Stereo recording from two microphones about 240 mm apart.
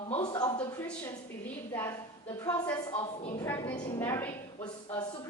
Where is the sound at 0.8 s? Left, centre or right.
Centre; by 3.4 s left.